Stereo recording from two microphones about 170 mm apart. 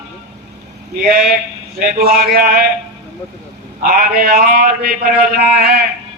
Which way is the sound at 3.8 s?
60° right (ahead or behind).